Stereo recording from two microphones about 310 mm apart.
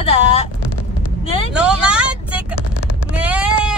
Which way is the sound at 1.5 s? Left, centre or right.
Centre.